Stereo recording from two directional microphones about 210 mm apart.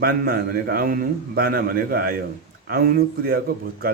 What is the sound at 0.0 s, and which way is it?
A man's voice, 45° right (ahead or behind).